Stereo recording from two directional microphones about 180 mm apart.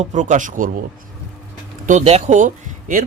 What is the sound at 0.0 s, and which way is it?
Speech, 45° right (ahead or behind).